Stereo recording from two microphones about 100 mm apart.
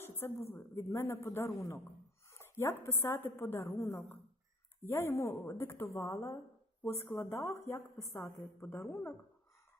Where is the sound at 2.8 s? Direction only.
25° left (ahead or behind).